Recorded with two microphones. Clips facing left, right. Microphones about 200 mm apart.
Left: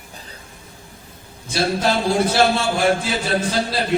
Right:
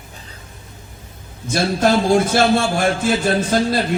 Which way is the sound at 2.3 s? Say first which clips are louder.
Right 2 dB; 50° right (ahead or behind).